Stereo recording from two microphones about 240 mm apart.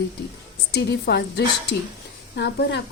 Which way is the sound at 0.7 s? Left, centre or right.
Left.